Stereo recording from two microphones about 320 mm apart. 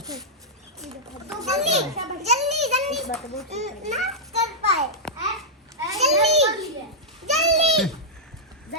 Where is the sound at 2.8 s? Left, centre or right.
Centre.